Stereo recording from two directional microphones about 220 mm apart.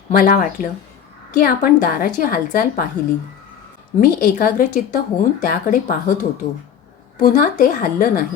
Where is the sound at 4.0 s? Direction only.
40° left (ahead or behind).